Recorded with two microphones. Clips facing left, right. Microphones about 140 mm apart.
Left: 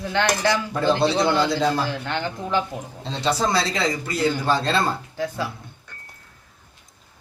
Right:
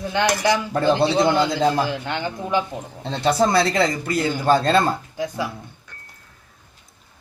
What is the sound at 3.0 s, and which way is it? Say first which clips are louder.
Speech: right 4 dB; 55° right (ahead or behind).